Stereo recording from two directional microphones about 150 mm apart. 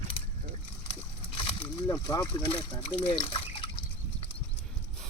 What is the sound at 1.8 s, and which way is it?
Speech, 25° left (ahead or behind).